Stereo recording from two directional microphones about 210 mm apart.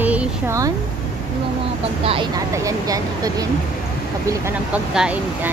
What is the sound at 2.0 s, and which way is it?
Speech, 25° right (ahead or behind).